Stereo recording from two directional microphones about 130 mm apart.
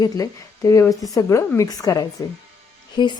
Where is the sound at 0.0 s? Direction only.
25° left (ahead or behind).